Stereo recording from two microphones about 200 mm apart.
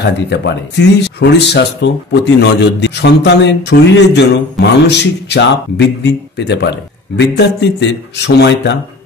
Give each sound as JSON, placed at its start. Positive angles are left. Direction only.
{"t": 0.0, "sound": "speech", "side_deg": 55}